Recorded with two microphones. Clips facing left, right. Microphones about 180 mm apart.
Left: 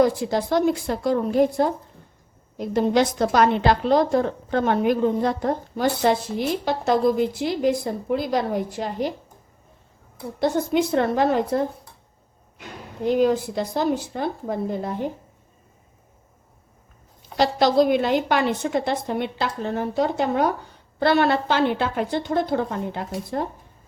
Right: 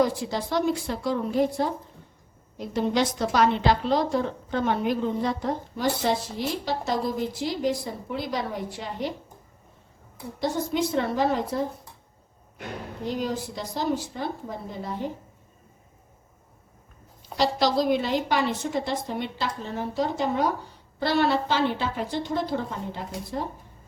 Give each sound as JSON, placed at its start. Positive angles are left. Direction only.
{"t": 0.0, "sound": "a woman's voice", "side_deg": 50}
{"t": 7.3, "sound": "a woman's voice", "side_deg": 55}
{"t": 10.4, "sound": "a woman's voice", "side_deg": 55}
{"t": 13.1, "sound": "a woman's voice", "side_deg": 60}
{"t": 17.3, "sound": "a woman's voice", "side_deg": 55}